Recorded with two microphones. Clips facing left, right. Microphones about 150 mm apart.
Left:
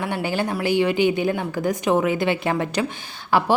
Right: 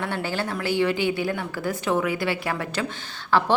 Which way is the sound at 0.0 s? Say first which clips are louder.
Left 3 dB; 15° left (ahead or behind).